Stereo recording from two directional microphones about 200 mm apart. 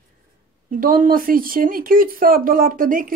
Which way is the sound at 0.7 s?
45° right (ahead or behind).